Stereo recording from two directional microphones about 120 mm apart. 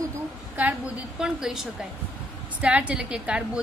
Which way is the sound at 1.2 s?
5° right (ahead or behind).